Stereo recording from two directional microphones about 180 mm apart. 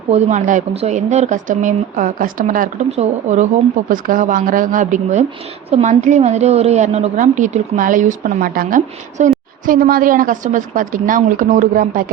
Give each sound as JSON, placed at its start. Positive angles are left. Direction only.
{"t": 0.1, "sound": "a woman's voice", "side_deg": -40}